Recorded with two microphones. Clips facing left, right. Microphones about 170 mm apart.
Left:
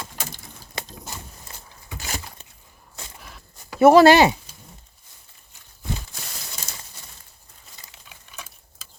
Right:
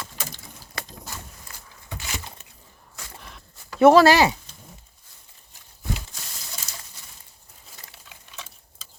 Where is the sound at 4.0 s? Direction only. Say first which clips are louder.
Left 4 dB; 25° left (ahead or behind).